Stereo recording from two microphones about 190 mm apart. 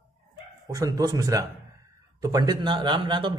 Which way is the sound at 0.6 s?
15° right (ahead or behind).